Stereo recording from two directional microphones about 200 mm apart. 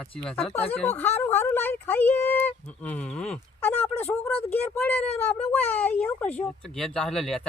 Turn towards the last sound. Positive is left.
turn(degrees=0)  # may be behind; listen again after turning